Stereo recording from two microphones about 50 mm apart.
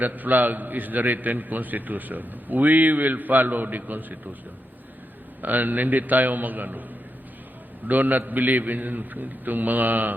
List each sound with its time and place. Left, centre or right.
0.0 s a man's voice: right
5.4 s a man's voice: right